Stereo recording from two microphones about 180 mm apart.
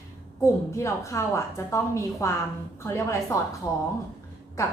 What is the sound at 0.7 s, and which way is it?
A woman's voice, 15° left (ahead or behind).